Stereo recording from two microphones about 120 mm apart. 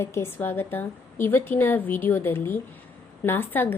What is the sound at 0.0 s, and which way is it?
A woman's voice, 25° left (ahead or behind).